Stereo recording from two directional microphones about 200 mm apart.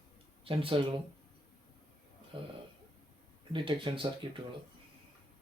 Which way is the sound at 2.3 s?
25° right (ahead or behind).